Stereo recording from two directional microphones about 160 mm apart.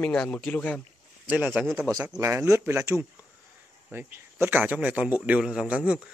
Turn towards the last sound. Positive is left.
turn(degrees=-5)  # may be behind; listen again after turning